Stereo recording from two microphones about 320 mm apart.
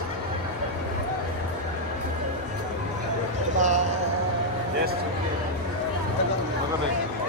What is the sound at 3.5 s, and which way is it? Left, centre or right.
Basketball bounce, right.